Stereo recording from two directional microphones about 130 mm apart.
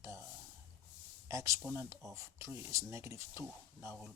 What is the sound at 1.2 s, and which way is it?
Speech, 25° right (ahead or behind).